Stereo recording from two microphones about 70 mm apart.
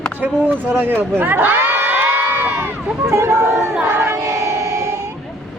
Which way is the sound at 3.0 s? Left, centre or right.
Right.